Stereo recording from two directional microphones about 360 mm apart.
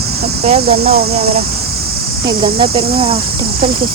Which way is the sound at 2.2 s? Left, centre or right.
Centre.